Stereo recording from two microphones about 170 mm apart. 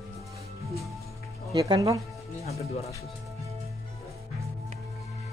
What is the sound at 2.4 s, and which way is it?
Speech, 40° left (ahead or behind).